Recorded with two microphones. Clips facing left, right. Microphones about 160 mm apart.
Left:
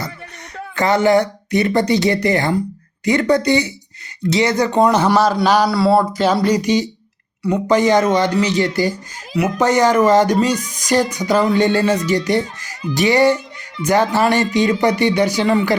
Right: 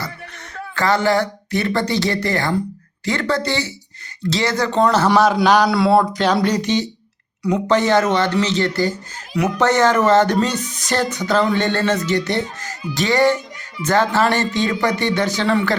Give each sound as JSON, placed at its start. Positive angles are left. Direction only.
{"t": 0.5, "sound": "speech", "side_deg": 20}
{"t": 5.1, "sound": "speech", "side_deg": 0}